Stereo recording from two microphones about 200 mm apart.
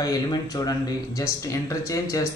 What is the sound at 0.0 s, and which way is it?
A man's voice, 20° left (ahead or behind).